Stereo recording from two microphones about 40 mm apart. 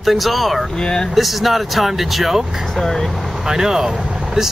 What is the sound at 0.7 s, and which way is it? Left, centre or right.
Speech, centre.